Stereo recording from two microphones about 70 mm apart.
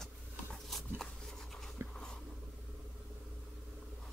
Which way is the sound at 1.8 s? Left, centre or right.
Right.